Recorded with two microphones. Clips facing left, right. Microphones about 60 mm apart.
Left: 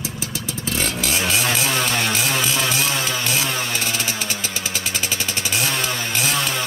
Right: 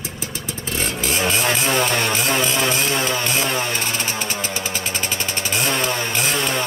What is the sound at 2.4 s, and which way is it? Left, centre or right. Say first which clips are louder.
Vehicle: right 2 dB; right.